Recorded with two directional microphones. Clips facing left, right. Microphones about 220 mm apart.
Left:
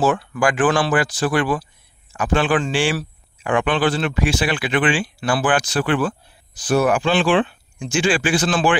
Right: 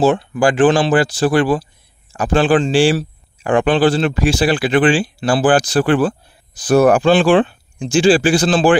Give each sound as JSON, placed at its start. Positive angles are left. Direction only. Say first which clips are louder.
{"t": 0.0, "sound": "speech", "louder": "right 5 dB", "side_deg": -25}